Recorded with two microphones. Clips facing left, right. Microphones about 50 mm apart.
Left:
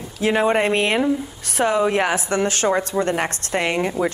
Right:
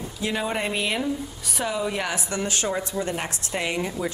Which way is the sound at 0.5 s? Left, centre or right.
Left.